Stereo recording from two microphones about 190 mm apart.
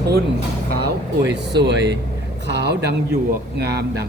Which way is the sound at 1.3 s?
65° right (ahead or behind).